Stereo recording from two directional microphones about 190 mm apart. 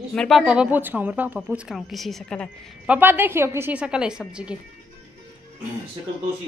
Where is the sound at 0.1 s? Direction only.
Centre (ahead or behind).